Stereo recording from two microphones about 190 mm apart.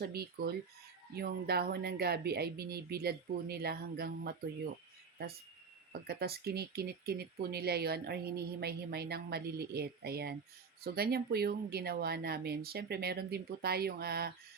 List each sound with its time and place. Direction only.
0.0 s speech: 55° right (ahead or behind)
5.9 s speech: 55° right (ahead or behind)